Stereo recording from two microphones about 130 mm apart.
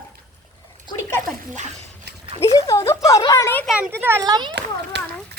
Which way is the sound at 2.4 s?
25° left (ahead or behind).